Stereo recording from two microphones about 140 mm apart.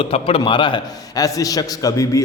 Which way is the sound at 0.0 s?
40° left (ahead or behind).